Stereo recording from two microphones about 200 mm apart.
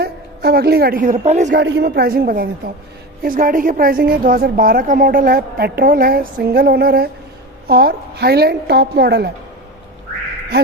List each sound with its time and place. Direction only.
0.0 s a woman's voice: 55° right (ahead or behind); by 1.6 s 35° right (ahead or behind)
1.6 s a woman's voice: 60° right (ahead or behind)